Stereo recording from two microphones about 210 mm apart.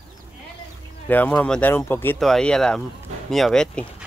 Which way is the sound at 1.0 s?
10° left (ahead or behind).